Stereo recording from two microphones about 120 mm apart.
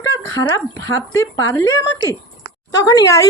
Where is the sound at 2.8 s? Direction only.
30° left (ahead or behind).